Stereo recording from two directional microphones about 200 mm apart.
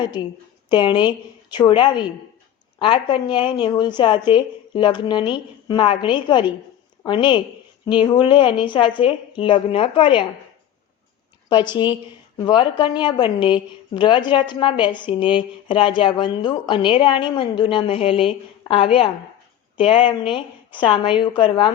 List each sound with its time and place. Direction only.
0.7 s a woman's voice: 20° left (ahead or behind)
11.4 s a woman's voice: 20° left (ahead or behind)